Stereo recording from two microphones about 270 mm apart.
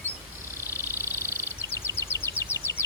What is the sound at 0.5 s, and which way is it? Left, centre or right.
Bird, centre.